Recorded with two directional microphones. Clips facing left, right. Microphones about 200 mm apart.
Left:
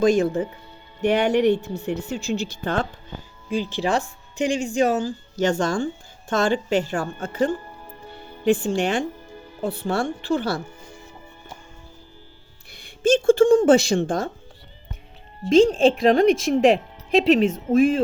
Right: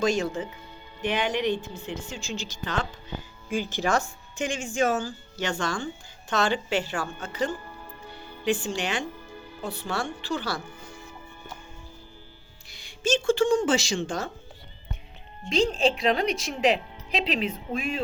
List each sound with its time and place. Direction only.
0.0 s speech: 55° left (ahead or behind)
3.5 s speech: 30° left (ahead or behind); by 10.6 s 50° left (ahead or behind)
12.7 s speech: 55° left (ahead or behind)
15.4 s speech: 50° left (ahead or behind)